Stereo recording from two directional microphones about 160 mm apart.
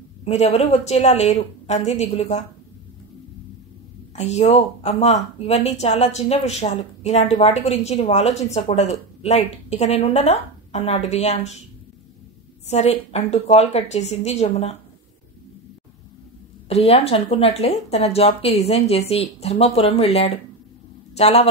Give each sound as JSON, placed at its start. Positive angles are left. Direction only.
{"t": 0.2, "sound": "a woman's voice", "side_deg": 40}
{"t": 4.1, "sound": "a woman's voice", "side_deg": 45}
{"t": 12.6, "sound": "a woman's voice", "side_deg": 45}
{"t": 16.6, "sound": "a woman's voice", "side_deg": 40}